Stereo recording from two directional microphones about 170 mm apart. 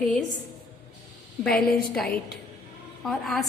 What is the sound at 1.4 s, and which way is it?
A woman's voice, 5° left (ahead or behind).